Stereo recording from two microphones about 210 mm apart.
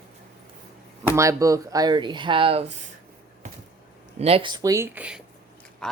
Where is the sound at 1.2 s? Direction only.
15° right (ahead or behind).